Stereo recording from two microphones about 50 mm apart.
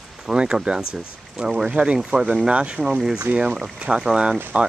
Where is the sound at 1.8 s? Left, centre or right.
Right.